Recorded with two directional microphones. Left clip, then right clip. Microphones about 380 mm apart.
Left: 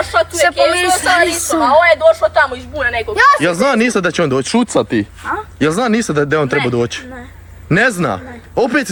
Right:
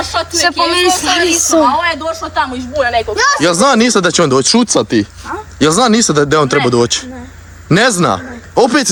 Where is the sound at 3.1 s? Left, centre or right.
Left.